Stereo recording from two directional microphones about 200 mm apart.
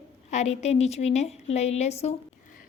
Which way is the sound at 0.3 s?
35° left (ahead or behind).